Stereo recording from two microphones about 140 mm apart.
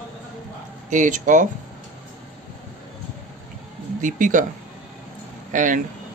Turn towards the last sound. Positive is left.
turn(degrees=-65)  # may be behind; listen again after turning